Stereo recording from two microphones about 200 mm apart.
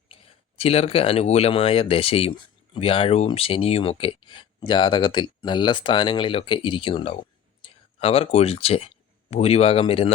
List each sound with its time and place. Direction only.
0.1 s speech: 30° left (ahead or behind)